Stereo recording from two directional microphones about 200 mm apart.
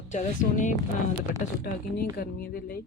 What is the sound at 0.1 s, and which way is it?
Speech, 40° left (ahead or behind).